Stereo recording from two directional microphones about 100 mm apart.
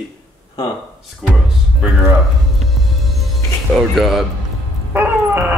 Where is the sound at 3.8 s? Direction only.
Centre (ahead or behind).